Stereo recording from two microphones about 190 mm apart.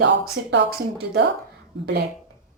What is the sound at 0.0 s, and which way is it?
A woman's voice, 65° right (ahead or behind).